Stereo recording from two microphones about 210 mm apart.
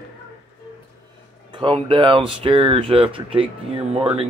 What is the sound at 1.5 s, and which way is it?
Speech, 25° right (ahead or behind).